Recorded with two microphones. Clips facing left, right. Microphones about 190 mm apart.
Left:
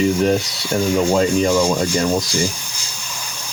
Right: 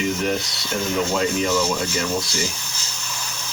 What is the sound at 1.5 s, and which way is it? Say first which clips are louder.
Speech: left 5 dB; 15° left (ahead or behind).